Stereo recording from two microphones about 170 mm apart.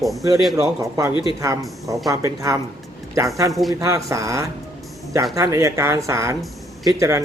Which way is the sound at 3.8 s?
20° right (ahead or behind).